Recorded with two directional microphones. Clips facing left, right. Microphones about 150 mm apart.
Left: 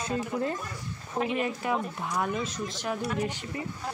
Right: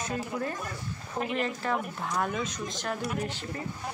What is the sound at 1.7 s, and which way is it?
Speech, 10° right (ahead or behind).